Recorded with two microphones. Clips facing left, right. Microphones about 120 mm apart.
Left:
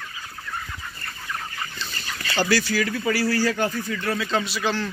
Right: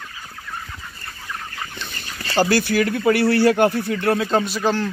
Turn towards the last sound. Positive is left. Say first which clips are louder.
# right 5 dB
turn(degrees=-45)  # may be behind; listen again after turning